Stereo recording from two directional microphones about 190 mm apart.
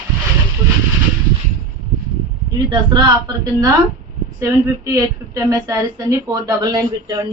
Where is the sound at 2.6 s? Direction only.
20° right (ahead or behind).